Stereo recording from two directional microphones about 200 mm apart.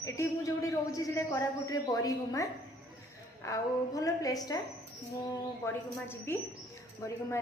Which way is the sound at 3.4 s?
15° left (ahead or behind).